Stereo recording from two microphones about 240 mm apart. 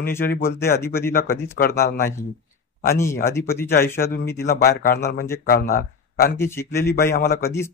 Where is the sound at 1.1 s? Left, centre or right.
Left.